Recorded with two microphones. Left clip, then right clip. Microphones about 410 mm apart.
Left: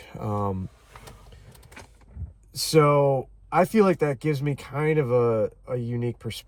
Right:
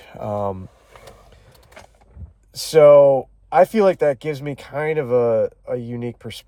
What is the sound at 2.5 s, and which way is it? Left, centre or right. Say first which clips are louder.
Speech: right 10 dB; centre.